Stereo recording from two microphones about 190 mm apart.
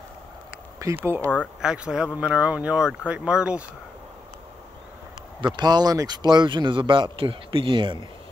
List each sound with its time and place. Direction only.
1.0 s speech: 15° right (ahead or behind)
5.4 s speech: 20° right (ahead or behind)